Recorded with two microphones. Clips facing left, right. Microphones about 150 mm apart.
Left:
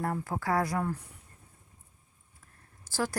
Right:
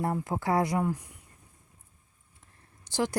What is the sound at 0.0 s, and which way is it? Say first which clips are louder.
Speech: right 3 dB; 20° right (ahead or behind).